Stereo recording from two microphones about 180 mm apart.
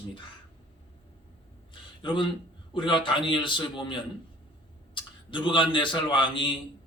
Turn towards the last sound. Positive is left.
turn(degrees=25)  # may be behind; listen again after turning